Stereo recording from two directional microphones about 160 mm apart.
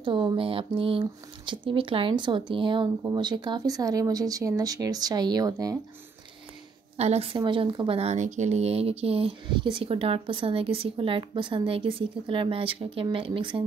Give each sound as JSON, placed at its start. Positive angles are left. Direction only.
{"t": 0.0, "sound": "speech", "side_deg": -30}
{"t": 7.0, "sound": "speech", "side_deg": -40}